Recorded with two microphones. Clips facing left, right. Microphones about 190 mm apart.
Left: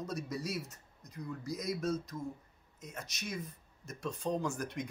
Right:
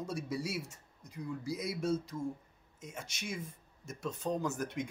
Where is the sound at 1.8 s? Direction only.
30° right (ahead or behind).